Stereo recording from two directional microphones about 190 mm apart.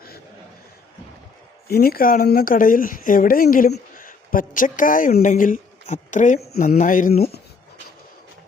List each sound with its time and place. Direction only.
1.6 s speech: 55° left (ahead or behind)